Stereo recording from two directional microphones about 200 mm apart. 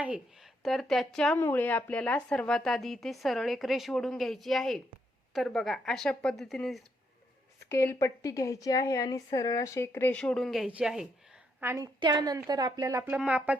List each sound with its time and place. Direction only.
0.6 s speech: centre (ahead or behind)
7.7 s a woman's voice: 15° left (ahead or behind); by 11.1 s centre (ahead or behind)
11.6 s a woman's voice: 15° right (ahead or behind)